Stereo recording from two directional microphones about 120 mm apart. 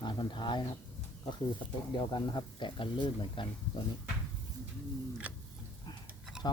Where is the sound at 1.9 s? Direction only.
35° left (ahead or behind).